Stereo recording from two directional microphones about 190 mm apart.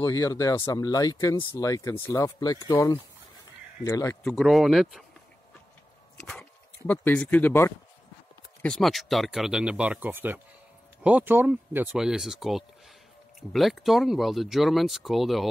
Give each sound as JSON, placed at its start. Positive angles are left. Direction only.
{"t": 0.0, "sound": "speech", "side_deg": 15}
{"t": 4.2, "sound": "speech", "side_deg": 0}
{"t": 6.9, "sound": "speech", "side_deg": 10}